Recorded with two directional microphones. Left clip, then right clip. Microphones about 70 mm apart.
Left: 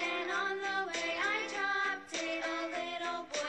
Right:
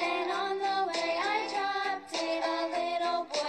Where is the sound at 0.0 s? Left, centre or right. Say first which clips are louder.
Right 4 dB; right.